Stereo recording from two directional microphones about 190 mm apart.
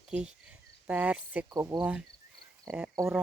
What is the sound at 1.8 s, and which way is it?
Cricket, 5° right (ahead or behind).